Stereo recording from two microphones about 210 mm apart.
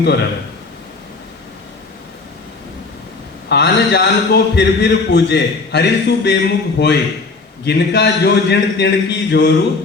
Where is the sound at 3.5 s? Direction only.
55° left (ahead or behind).